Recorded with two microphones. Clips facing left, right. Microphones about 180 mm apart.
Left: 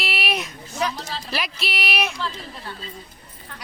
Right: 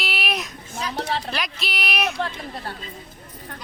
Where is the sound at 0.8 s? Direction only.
60° right (ahead or behind).